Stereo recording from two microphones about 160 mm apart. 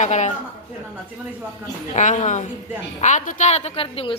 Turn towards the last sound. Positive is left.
turn(degrees=35)  # may be behind; listen again after turning